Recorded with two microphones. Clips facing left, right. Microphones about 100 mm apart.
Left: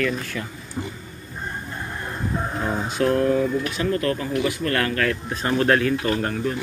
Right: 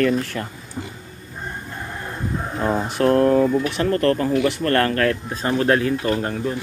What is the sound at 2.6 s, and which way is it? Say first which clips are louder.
Speech: right 4 dB; 50° right (ahead or behind).